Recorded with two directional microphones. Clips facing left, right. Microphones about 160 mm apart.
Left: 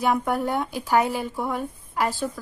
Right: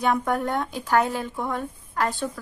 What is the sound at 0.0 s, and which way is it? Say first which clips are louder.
A woman's voice: even; 5° left (ahead or behind).